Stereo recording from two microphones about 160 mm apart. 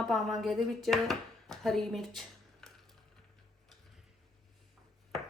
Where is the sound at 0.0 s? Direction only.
Centre (ahead or behind).